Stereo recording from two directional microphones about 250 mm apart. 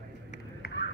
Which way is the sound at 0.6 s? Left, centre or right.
Left.